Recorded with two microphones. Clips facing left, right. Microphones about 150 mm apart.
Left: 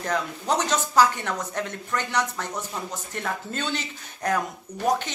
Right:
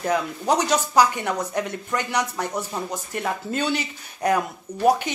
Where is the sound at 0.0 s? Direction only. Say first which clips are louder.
Right 4 dB; 10° right (ahead or behind).